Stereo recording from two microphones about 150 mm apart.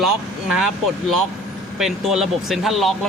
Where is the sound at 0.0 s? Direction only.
Centre (ahead or behind).